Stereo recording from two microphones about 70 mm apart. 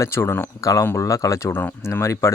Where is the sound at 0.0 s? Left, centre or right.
Left.